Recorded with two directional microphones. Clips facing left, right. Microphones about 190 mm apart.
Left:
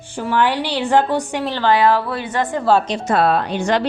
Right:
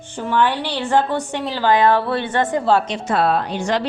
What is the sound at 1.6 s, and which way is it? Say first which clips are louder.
Speech: even; 20° right (ahead or behind).